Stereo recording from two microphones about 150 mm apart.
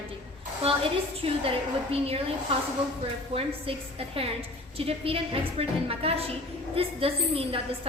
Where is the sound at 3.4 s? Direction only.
40° right (ahead or behind).